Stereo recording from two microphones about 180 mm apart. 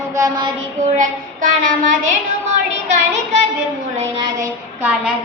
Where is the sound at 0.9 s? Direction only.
45° right (ahead or behind).